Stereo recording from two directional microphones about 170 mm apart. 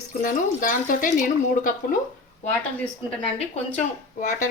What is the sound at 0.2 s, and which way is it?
Speech, 50° left (ahead or behind).